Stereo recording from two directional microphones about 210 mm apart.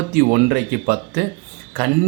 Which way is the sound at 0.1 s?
45° right (ahead or behind).